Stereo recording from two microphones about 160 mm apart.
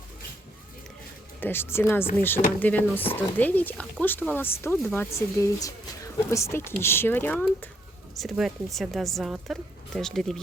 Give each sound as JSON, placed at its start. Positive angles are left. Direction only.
{"t": 1.4, "sound": "speech", "side_deg": 15}